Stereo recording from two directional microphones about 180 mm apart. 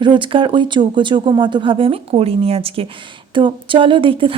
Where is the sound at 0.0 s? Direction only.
25° right (ahead or behind).